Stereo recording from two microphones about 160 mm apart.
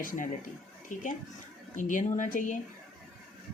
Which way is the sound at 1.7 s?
55° left (ahead or behind).